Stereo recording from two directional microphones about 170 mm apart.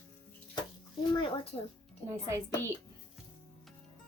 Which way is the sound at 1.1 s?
30° left (ahead or behind).